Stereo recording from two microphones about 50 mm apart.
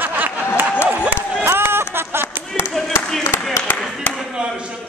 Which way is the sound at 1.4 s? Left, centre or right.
Right.